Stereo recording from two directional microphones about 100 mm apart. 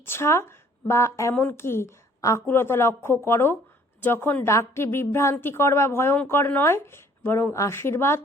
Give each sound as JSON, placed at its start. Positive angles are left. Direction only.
{"t": 0.0, "sound": "speech", "side_deg": 25}